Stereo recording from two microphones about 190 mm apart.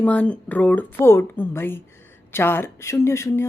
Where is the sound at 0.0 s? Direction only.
5° left (ahead or behind).